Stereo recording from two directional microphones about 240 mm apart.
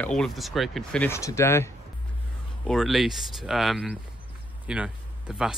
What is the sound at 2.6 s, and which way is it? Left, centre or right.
Speech, centre.